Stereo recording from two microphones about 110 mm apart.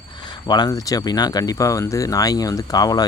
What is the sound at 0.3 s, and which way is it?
Speech, 40° left (ahead or behind).